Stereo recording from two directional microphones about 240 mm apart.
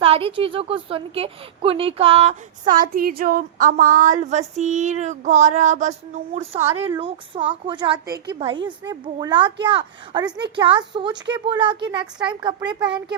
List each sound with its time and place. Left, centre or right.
0.0 s a woman's voice: right
2.8 s female singing: right
6.3 s a woman's voice: right
6.6 s speech: centre
7.0 s a woman's voice: right